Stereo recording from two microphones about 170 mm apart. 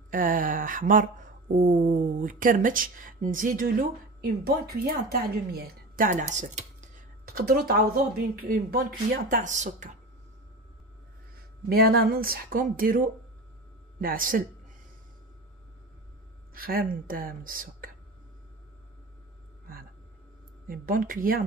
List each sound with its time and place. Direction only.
0.1 s speech: 55° right (ahead or behind)
4.2 s a woman's voice: 65° right (ahead or behind); by 6.9 s 45° right (ahead or behind)
7.3 s a woman's voice: 65° right (ahead or behind); by 9.9 s 45° right (ahead or behind)
11.7 s a woman's voice: 65° right (ahead or behind)
16.5 s a woman's voice: 60° right (ahead or behind)
20.6 s a woman's voice: 55° right (ahead or behind)